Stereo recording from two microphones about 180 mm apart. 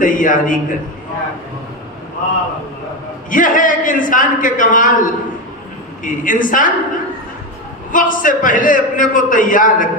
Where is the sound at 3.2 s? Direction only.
50° left (ahead or behind).